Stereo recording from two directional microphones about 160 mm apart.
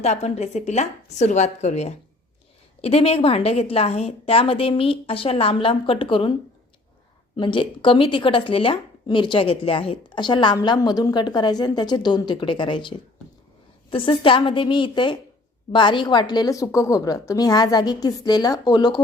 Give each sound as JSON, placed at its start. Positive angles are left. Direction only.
{"t": 0.0, "sound": "a woman's voice", "side_deg": 45}
{"t": 7.3, "sound": "speech", "side_deg": 30}
{"t": 13.9, "sound": "a woman's voice", "side_deg": 35}